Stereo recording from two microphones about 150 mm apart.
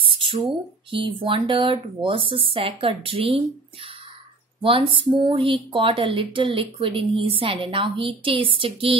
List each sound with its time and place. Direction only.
0.0 s speech: 35° right (ahead or behind)